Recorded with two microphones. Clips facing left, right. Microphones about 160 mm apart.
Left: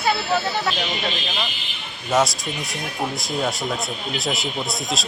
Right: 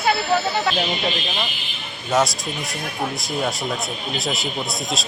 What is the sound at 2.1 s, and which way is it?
Speech, centre (ahead or behind).